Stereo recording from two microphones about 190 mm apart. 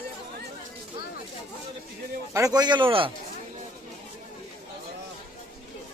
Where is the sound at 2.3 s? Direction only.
20° right (ahead or behind).